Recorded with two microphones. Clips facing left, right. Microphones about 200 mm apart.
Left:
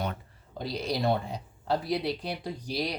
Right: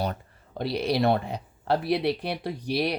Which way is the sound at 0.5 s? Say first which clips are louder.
Right 6 dB; 65° right (ahead or behind).